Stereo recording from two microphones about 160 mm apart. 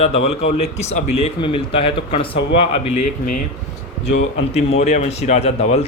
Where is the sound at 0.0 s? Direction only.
40° left (ahead or behind).